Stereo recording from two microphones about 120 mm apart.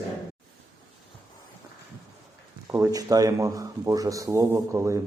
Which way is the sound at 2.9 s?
30° right (ahead or behind).